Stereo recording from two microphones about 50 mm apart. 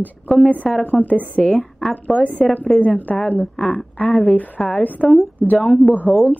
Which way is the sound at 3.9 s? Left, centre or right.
Left.